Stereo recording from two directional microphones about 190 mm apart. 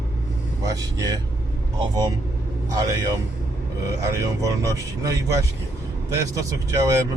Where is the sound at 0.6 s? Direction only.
20° right (ahead or behind).